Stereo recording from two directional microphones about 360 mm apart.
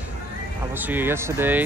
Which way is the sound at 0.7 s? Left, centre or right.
Centre.